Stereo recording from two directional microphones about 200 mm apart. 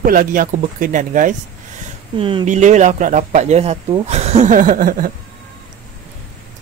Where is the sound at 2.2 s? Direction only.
25° right (ahead or behind); by 5.1 s 45° right (ahead or behind).